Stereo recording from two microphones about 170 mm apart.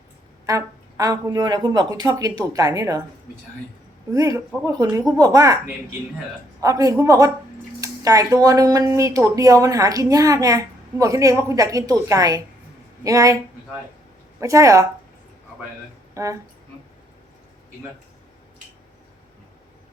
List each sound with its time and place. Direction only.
0.4 s speech: 20° right (ahead or behind)
4.1 s speech: 20° right (ahead or behind)
14.4 s speech: 20° right (ahead or behind)
16.2 s speech: 20° right (ahead or behind)